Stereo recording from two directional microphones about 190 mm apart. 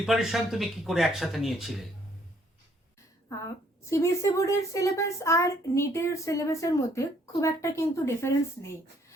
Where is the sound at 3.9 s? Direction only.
15° left (ahead or behind).